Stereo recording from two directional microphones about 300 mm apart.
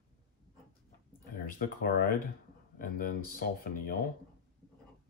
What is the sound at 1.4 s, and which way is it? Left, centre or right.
Speech, left.